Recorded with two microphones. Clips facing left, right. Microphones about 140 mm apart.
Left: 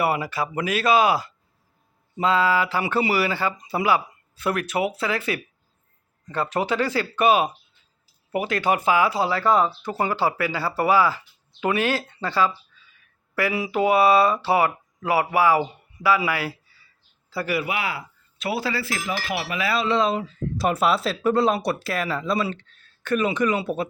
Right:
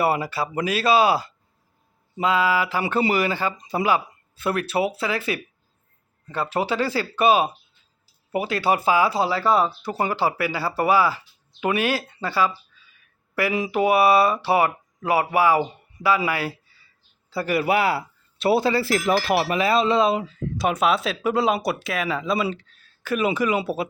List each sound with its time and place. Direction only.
0.0 s speech: 30° right (ahead or behind)
2.1 s speech: 15° right (ahead or behind)
4.4 s speech: 30° right (ahead or behind)
6.5 s speech: 20° right (ahead or behind)
9.5 s speech: 10° right (ahead or behind)
17.4 s speech: 45° right (ahead or behind)
19.1 s speech: 40° right (ahead or behind)
19.5 s speech: 25° right (ahead or behind)
20.0 s speech: 10° right (ahead or behind)
20.6 s speech: centre (ahead or behind)